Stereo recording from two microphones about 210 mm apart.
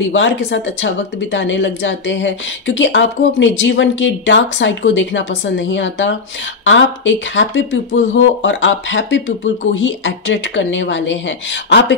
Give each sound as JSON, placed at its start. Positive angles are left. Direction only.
{"t": 0.1, "sound": "speech", "side_deg": 60}